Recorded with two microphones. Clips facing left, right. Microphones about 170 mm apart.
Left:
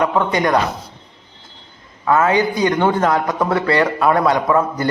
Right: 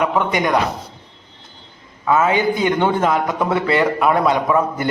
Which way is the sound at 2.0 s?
15° right (ahead or behind).